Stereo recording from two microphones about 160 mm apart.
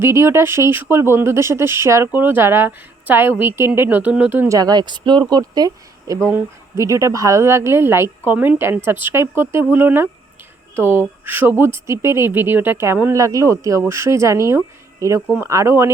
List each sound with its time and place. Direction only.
0.0 s speech: 15° right (ahead or behind)